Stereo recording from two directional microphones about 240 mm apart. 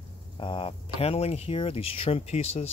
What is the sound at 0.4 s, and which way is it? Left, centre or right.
Speech, left.